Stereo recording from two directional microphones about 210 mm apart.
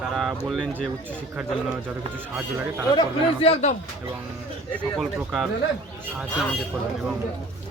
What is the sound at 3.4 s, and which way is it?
Speech, 30° left (ahead or behind).